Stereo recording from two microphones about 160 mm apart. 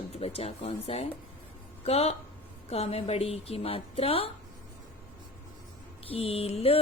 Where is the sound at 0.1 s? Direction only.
40° left (ahead or behind).